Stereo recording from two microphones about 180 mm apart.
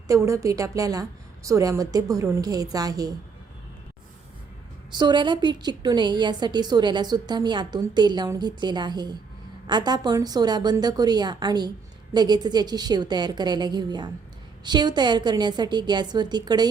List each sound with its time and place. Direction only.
0.1 s a woman's voice: 15° right (ahead or behind)
4.9 s a woman's voice: 25° right (ahead or behind)